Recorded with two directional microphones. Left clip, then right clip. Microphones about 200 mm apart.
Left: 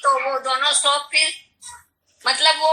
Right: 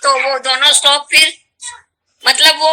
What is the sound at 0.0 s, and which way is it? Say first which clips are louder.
A man's voice: right 6 dB; 40° right (ahead or behind).